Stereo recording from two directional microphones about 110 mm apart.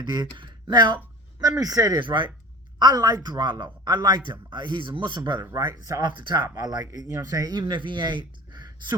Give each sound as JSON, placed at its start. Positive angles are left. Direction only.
{"t": 0.0, "sound": "speech", "side_deg": -40}
{"t": 2.0, "sound": "speech", "side_deg": -45}
{"t": 2.7, "sound": "speech", "side_deg": -35}